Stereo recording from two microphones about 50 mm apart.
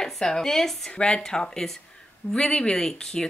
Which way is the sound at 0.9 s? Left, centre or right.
Centre.